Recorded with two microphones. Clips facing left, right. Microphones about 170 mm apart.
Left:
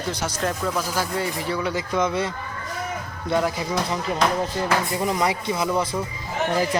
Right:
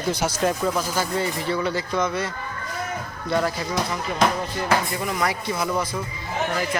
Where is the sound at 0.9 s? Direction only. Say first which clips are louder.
Right 1 dB; 10° left (ahead or behind).